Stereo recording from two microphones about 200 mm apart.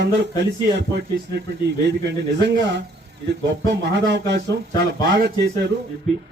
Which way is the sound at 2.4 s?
60° right (ahead or behind).